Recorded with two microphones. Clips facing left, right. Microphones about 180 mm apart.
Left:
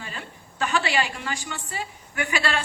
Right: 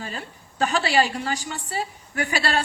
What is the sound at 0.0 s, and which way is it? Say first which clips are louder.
A woman's voice: right 4 dB; 35° right (ahead or behind).